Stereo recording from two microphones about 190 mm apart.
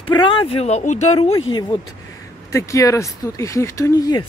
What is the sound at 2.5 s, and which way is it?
Speech, 15° left (ahead or behind).